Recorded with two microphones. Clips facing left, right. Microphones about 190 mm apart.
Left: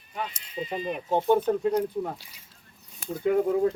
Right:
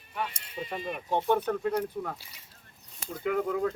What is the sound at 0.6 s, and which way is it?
Speech, 15° left (ahead or behind).